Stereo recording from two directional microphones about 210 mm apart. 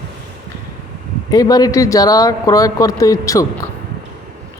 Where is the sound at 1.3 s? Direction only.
15° left (ahead or behind).